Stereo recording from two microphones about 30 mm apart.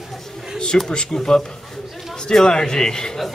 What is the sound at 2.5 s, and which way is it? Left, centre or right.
Speech, left.